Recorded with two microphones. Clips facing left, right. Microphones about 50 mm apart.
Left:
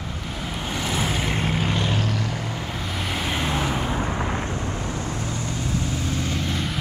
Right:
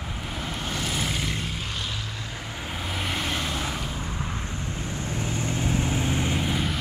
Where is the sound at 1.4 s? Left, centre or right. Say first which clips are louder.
Left 8 dB; left.